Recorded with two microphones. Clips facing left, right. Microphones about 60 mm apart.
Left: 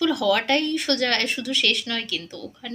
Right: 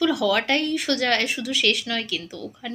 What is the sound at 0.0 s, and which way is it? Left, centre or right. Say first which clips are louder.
Speech: even; centre.